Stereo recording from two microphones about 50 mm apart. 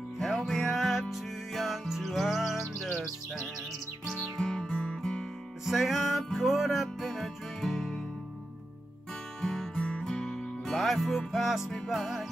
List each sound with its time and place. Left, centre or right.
0.2 s music: centre
4.0 s music: centre
5.7 s music: centre
9.4 s music: centre